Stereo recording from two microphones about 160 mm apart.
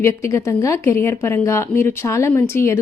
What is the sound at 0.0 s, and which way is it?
A woman's voice, 15° left (ahead or behind).